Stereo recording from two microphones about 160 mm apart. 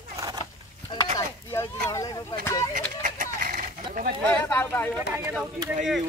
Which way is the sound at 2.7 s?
55° right (ahead or behind).